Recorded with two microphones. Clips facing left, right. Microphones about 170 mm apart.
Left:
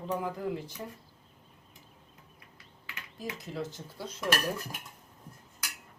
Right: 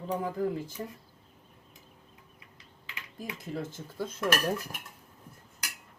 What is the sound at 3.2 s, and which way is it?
Speech, 50° right (ahead or behind).